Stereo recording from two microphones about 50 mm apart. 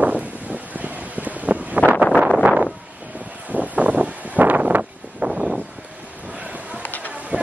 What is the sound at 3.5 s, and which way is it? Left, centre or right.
Wind, right.